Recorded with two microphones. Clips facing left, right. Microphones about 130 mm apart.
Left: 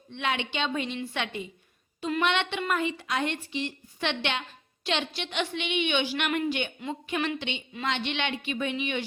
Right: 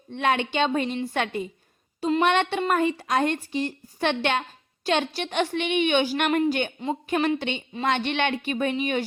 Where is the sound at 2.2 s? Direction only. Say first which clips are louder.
Right 5 dB; 45° right (ahead or behind).